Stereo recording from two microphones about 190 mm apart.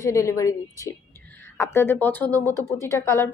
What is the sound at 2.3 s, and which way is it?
Speech, 15° right (ahead or behind).